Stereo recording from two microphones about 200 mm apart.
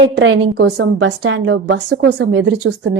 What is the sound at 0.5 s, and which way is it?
Speech, 55° right (ahead or behind).